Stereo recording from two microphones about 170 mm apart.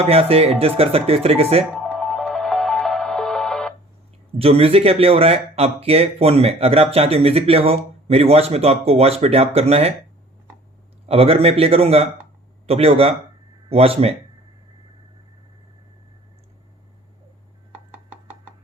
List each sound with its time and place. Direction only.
0.0 s speech: 35° right (ahead or behind)
1.7 s music: centre (ahead or behind)
4.4 s speech: 35° right (ahead or behind)
11.1 s speech: 35° right (ahead or behind)